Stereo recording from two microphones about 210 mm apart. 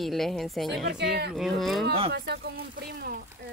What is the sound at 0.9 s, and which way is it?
Speech, 50° right (ahead or behind).